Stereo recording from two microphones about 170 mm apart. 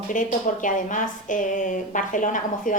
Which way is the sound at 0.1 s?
50° left (ahead or behind).